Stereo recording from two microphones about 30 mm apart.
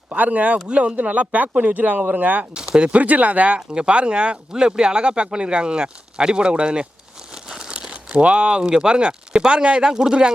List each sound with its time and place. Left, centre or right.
0.2 s speech: right
0.7 s speech: right
2.0 s speech: right
2.6 s speech: right
2.9 s speech: right
3.8 s speech: right
7.4 s crumpling: right
7.7 s crumpling: right
8.8 s speech: right